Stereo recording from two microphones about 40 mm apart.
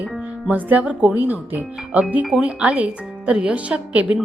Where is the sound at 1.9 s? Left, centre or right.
Right.